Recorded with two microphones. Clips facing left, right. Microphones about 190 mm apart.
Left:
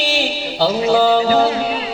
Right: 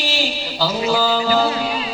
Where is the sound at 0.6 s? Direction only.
60° left (ahead or behind).